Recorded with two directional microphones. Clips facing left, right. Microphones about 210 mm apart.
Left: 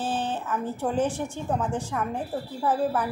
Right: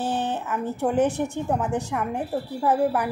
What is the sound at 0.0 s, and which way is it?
Speech, 20° right (ahead or behind).